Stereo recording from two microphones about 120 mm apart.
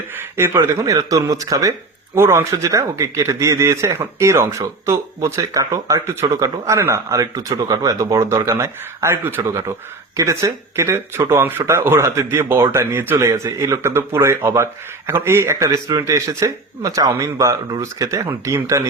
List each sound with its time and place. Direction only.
0.1 s speech: 20° right (ahead or behind)